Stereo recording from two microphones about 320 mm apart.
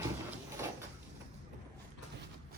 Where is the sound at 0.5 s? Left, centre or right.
Centre.